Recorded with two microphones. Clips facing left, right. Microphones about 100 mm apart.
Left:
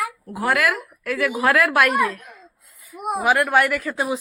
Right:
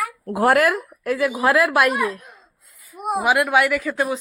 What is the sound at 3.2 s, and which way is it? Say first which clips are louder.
Speech: even; 10° right (ahead or behind).